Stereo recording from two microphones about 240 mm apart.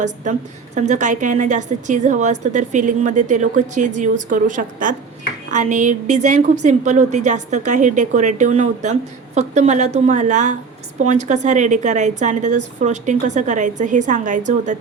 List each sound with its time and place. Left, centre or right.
0.3 s a woman's voice: right